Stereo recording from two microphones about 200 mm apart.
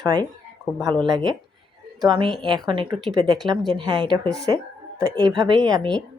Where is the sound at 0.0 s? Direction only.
20° right (ahead or behind).